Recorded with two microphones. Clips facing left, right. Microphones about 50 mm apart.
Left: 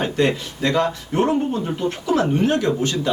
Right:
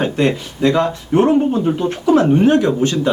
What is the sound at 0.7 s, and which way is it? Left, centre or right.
Speech, centre.